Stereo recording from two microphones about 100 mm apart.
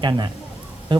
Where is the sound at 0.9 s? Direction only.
55° right (ahead or behind).